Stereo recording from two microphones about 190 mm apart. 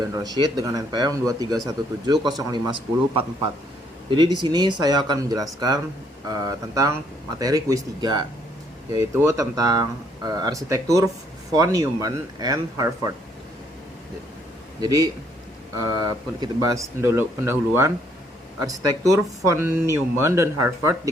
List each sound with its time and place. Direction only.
0.1 s speech: 20° right (ahead or behind)
4.1 s speech: 25° right (ahead or behind)
14.8 s speech: 20° right (ahead or behind)